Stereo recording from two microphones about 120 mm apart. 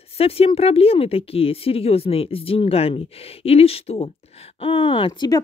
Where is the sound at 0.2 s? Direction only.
55° left (ahead or behind).